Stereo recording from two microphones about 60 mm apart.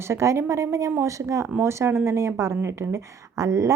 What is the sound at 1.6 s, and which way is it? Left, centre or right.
A woman's voice, right.